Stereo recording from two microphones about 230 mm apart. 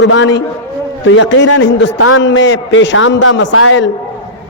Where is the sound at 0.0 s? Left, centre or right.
Left.